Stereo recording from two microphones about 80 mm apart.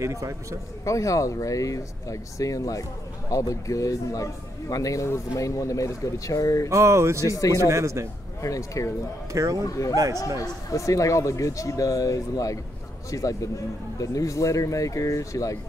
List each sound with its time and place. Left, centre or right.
0.0 s a man's voice: right
0.8 s speech: left
6.7 s a man's voice: right
7.2 s speech: left
7.6 s a man's voice: right
8.4 s speech: left
9.3 s a man's voice: right
9.7 s speech: left